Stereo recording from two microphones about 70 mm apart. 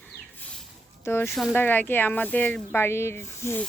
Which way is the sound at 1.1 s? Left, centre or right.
Left.